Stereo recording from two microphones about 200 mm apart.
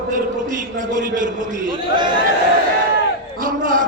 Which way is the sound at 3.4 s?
40° right (ahead or behind).